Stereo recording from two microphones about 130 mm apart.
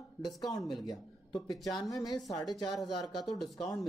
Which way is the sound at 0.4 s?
30° left (ahead or behind).